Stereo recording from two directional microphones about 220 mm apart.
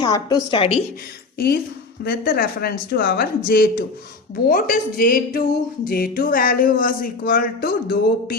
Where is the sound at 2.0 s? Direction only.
40° left (ahead or behind).